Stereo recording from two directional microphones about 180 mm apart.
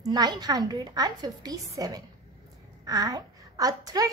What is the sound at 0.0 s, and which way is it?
A woman's voice, 20° right (ahead or behind).